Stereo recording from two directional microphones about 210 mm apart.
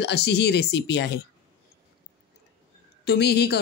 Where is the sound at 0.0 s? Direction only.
55° left (ahead or behind).